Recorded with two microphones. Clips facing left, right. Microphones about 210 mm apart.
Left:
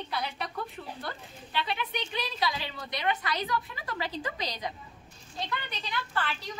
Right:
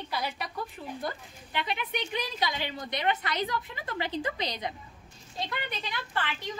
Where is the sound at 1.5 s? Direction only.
20° right (ahead or behind).